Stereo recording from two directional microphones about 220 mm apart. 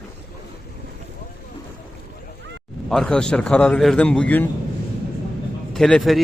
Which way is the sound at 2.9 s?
5° left (ahead or behind).